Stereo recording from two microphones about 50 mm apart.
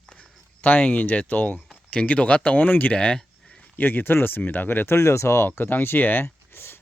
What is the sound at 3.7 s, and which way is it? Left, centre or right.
Speech, left.